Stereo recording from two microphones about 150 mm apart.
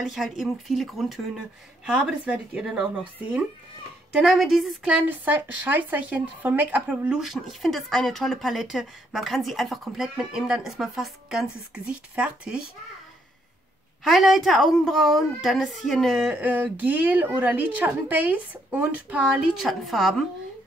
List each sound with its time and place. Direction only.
0.0 s speech: centre (ahead or behind)
4.1 s speech: 5° right (ahead or behind)
14.0 s speech: centre (ahead or behind)